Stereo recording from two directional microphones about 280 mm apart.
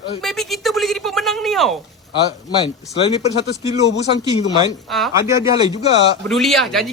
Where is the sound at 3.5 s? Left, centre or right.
Left.